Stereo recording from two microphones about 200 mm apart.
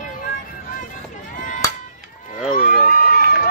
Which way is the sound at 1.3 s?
40° left (ahead or behind).